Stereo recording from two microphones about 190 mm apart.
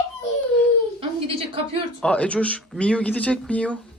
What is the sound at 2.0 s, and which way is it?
Speech, 5° left (ahead or behind).